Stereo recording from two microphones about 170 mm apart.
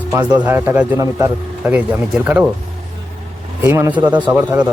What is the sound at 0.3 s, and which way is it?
Speech, 10° right (ahead or behind).